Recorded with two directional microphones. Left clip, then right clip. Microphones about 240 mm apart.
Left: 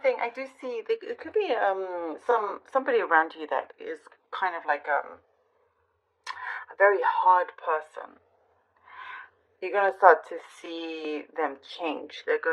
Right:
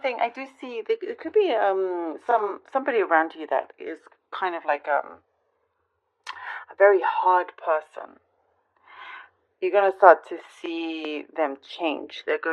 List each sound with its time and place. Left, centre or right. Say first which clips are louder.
0.0 s a woman's voice: right 1 dB; right
6.2 s speech: even; right